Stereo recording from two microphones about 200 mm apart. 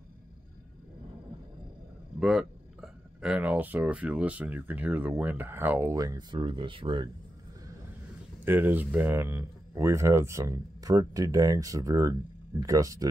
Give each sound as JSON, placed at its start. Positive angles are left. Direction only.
{"t": 2.1, "sound": "speech", "side_deg": 0}
{"t": 8.5, "sound": "speech", "side_deg": -10}